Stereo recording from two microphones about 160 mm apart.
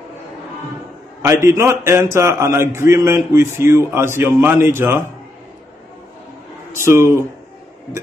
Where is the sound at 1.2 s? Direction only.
20° right (ahead or behind).